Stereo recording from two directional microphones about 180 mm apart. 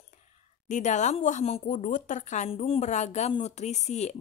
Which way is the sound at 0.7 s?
40° left (ahead or behind).